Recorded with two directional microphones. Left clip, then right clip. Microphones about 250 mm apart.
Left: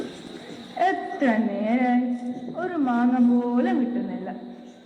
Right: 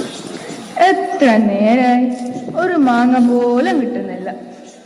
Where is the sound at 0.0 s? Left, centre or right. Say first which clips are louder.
Right 10 dB; right.